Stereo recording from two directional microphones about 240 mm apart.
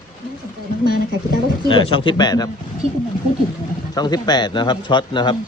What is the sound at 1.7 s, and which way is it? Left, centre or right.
Speech, left.